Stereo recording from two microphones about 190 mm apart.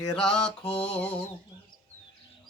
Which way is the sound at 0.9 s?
5° left (ahead or behind).